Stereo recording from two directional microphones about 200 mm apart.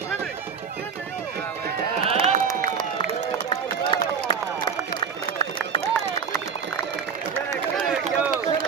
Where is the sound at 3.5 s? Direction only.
20° left (ahead or behind).